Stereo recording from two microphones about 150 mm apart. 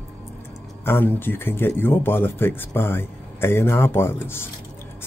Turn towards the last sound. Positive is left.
turn(degrees=15)  # may be behind; listen again after turning